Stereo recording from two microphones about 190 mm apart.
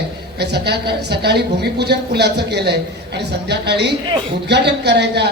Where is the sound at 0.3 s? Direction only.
60° right (ahead or behind).